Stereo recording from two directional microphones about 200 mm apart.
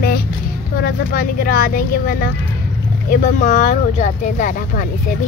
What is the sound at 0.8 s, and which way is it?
Speech, 45° left (ahead or behind).